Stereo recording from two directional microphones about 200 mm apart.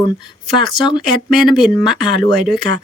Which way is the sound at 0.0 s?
20° left (ahead or behind).